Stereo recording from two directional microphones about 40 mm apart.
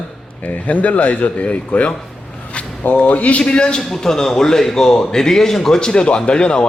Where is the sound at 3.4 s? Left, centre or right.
Left.